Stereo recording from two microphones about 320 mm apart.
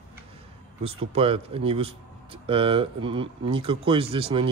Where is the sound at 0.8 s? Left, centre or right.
Centre.